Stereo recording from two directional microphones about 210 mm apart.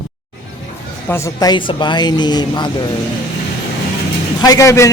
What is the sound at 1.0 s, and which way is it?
Speech, 10° left (ahead or behind).